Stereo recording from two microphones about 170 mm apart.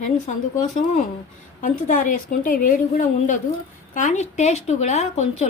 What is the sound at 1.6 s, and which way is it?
A woman's voice, 50° left (ahead or behind).